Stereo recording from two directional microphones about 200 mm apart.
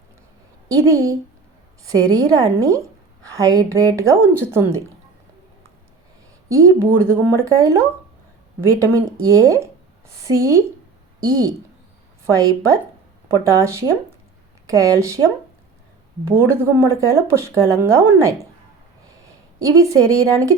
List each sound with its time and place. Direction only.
0.7 s speech: 15° right (ahead or behind)
6.5 s speech: 15° right (ahead or behind)
19.5 s speech: 15° right (ahead or behind)